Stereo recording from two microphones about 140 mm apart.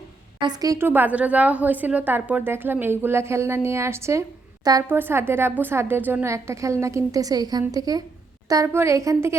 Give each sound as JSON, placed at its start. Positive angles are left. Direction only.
{"t": 0.4, "sound": "a woman's voice", "side_deg": -25}
{"t": 4.9, "sound": "a woman's voice", "side_deg": -15}